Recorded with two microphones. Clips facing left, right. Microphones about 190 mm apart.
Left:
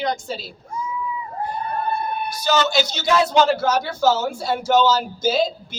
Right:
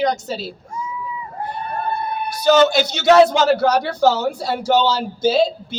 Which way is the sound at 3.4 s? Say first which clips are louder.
Right 3 dB; 40° right (ahead or behind).